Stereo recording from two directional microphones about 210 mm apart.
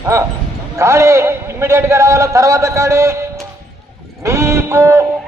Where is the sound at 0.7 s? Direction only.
15° right (ahead or behind).